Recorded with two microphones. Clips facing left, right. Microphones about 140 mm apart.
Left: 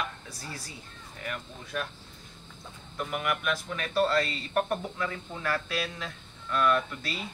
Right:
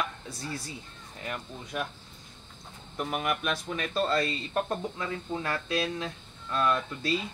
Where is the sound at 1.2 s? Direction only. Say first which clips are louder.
Right 1 dB; 20° right (ahead or behind).